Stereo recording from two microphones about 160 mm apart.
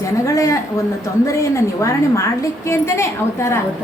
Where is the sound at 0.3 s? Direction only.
20° left (ahead or behind).